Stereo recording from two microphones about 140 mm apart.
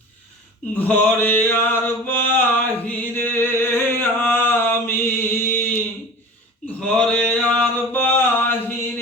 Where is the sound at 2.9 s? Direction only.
15° left (ahead or behind).